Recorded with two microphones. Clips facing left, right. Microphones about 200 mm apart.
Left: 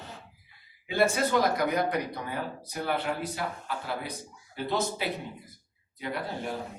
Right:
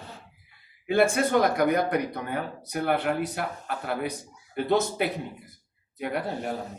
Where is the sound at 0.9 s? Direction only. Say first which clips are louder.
Right 4 dB; 55° right (ahead or behind).